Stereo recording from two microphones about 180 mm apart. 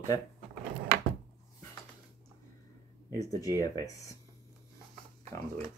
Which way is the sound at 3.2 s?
20° left (ahead or behind).